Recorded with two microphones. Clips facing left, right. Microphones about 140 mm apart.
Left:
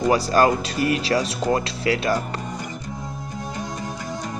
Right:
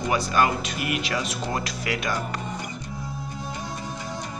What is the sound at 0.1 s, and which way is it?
Speech, 35° left (ahead or behind).